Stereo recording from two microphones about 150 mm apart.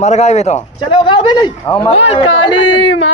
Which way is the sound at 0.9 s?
35° left (ahead or behind).